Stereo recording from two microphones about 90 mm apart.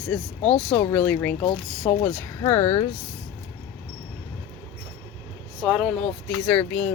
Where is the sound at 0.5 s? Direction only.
15° left (ahead or behind); by 2.8 s 30° left (ahead or behind).